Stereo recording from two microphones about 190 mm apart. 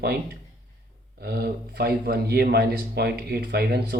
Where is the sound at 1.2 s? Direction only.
50° right (ahead or behind).